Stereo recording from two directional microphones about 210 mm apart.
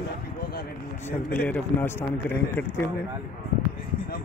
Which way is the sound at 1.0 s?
10° left (ahead or behind).